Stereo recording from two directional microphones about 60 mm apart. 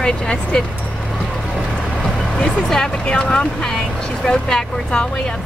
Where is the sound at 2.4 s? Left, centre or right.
Centre.